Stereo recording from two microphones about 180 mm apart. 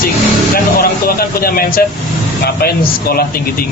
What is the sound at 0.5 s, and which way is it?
Vehicle, 55° left (ahead or behind).